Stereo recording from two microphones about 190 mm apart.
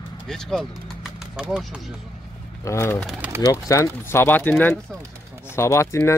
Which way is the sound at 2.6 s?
15° left (ahead or behind).